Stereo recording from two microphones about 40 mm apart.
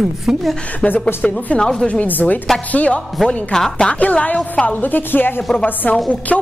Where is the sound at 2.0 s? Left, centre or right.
Left.